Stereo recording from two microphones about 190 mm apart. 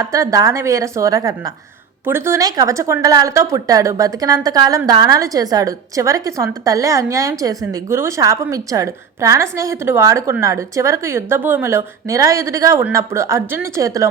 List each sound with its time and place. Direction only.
0.0 s a woman's voice: 15° right (ahead or behind)